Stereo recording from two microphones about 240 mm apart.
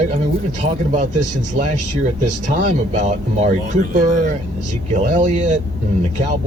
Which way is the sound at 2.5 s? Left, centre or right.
Right.